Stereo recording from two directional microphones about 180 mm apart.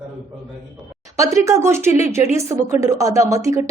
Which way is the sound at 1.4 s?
15° right (ahead or behind).